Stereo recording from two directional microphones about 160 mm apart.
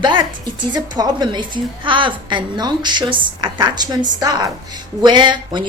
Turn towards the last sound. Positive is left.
turn(degrees=-30)  # may be behind; listen again after turning